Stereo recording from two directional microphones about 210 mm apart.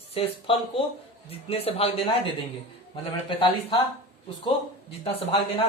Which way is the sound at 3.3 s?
25° left (ahead or behind).